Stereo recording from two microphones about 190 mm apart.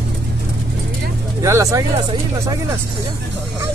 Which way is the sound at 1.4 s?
15° right (ahead or behind).